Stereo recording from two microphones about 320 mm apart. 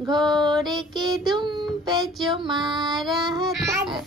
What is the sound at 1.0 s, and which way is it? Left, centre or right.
Child singing, centre.